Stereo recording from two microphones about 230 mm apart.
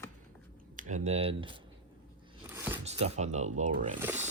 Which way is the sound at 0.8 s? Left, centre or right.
Right.